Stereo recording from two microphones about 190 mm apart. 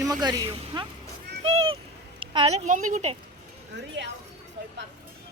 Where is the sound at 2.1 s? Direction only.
30° right (ahead or behind).